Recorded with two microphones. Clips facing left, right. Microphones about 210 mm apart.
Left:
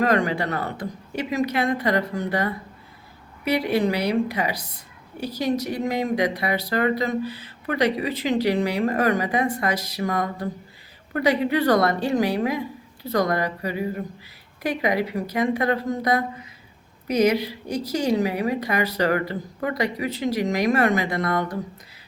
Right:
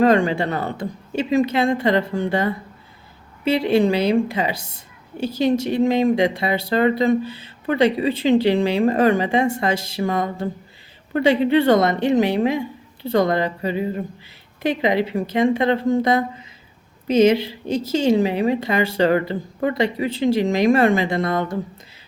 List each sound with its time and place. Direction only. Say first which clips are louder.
0.0 s speech: right 5 dB; 25° right (ahead or behind)